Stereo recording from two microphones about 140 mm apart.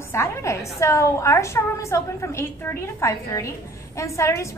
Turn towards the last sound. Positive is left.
turn(degrees=20)  # may be behind; listen again after turning